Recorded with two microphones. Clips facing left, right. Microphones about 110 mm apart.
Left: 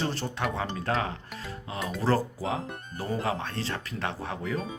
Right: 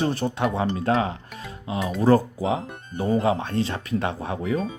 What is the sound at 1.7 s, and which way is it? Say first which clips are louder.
Speech: right 8 dB; centre (ahead or behind).